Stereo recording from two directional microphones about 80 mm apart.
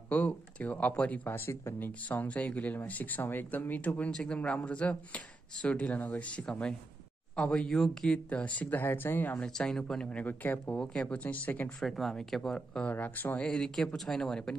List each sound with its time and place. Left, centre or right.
0.1 s speech: centre; by 1.9 s left
2.0 s speech: centre
8.3 s speech: centre
9.5 s speech: centre
10.0 s speech: left
10.8 s speech: centre
11.8 s speech: centre
12.9 s speech: left
13.5 s speech: centre